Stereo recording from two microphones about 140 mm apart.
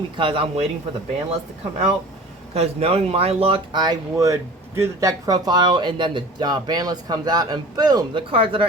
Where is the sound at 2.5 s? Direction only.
45° right (ahead or behind).